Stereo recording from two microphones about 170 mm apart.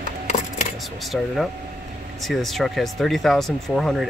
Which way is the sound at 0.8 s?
Centre (ahead or behind).